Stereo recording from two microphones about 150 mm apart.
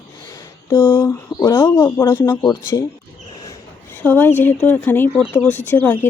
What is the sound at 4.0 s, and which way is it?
Speech, 10° left (ahead or behind).